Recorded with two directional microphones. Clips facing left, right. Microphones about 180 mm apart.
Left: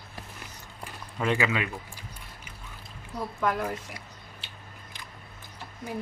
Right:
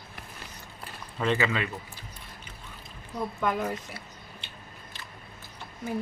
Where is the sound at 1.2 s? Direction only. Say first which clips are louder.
Even; 10° left (ahead or behind).